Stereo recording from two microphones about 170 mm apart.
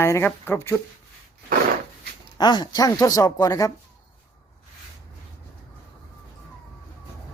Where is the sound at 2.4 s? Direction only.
25° left (ahead or behind).